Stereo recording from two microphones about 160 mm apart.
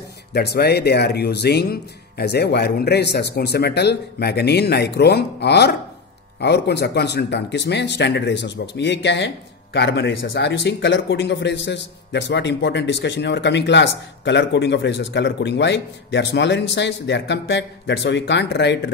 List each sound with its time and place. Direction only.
0.3 s speech: 90° left